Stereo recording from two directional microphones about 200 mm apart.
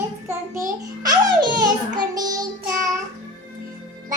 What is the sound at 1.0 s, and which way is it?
Speech, 20° right (ahead or behind).